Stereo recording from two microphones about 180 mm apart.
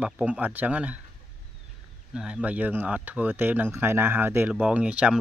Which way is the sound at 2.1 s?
5° right (ahead or behind).